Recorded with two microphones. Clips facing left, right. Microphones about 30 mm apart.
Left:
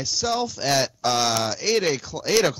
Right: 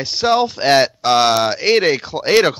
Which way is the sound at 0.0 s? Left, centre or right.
Right.